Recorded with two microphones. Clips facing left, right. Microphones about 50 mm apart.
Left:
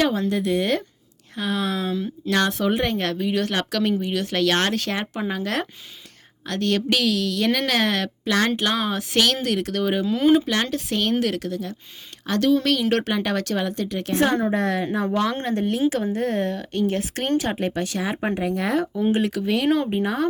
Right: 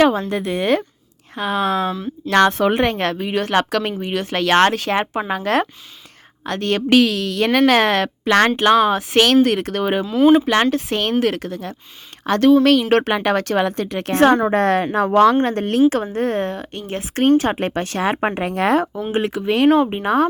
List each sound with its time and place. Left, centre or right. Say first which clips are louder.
0.1 s speech: right 1 dB; right
8.3 s speech: right 8 dB; right
9.0 s speech: right 8 dB; right
10.1 s speech: right 6 dB; centre
10.4 s speech: right 7 dB; right
10.7 s speech: right 4 dB; right
15.0 s speech: right 13 dB; right
15.4 s speech: right 3 dB; right
16.1 s speech: right 3 dB; right
19.1 s speech: right 8 dB; right